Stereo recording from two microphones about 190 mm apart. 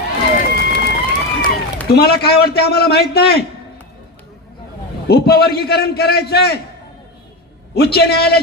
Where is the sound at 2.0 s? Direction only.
55° left (ahead or behind).